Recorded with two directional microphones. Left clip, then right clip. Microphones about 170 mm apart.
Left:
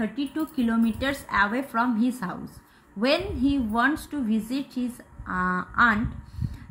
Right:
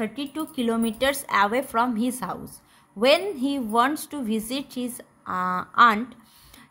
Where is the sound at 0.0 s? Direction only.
40° right (ahead or behind).